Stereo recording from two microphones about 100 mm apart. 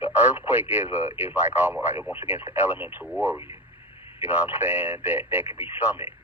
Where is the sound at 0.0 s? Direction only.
20° right (ahead or behind).